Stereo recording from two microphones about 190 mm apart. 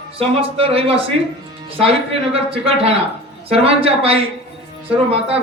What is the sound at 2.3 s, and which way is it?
Speech, 30° right (ahead or behind).